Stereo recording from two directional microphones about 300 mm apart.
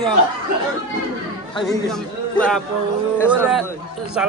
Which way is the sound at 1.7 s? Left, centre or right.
Centre.